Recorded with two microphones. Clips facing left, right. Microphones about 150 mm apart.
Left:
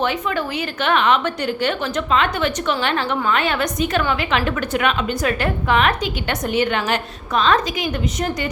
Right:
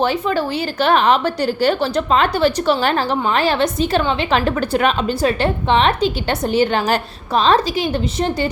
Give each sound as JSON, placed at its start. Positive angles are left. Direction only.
{"t": 0.0, "sound": "a woman's voice", "side_deg": -35}